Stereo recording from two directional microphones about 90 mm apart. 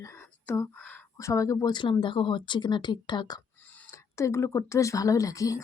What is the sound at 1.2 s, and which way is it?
Speech, 35° left (ahead or behind).